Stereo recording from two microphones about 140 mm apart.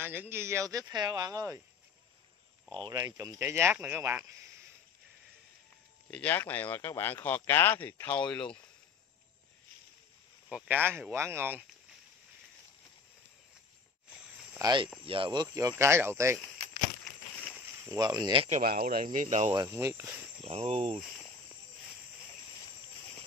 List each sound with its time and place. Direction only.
0.0 s speech: 15° right (ahead or behind)
2.7 s speech: 30° right (ahead or behind)
6.0 s speech: 10° left (ahead or behind)
10.5 s speech: 15° right (ahead or behind)
14.6 s speech: 30° right (ahead or behind)
15.4 s speech: 25° right (ahead or behind)
17.8 s speech: 25° right (ahead or behind)
18.6 s speech: 90° right; by 19.5 s 55° right (ahead or behind)
19.5 s speech: 20° right (ahead or behind)
20.4 s speech: 45° right (ahead or behind)